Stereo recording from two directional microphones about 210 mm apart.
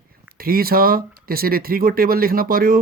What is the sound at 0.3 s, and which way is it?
Speech, 45° right (ahead or behind).